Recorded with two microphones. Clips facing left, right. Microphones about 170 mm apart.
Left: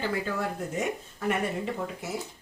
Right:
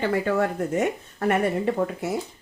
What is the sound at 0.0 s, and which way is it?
Speech, 65° right (ahead or behind).